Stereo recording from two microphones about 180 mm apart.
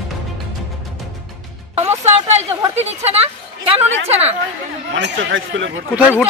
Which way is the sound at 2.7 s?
35° right (ahead or behind).